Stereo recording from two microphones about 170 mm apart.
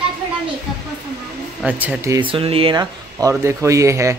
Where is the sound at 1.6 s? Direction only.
10° right (ahead or behind).